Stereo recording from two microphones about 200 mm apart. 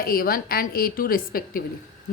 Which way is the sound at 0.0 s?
45° left (ahead or behind).